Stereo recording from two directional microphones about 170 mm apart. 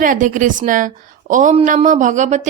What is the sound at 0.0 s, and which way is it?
A woman's voice, 50° right (ahead or behind).